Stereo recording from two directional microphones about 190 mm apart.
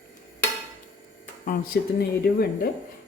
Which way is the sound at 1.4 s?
45° left (ahead or behind).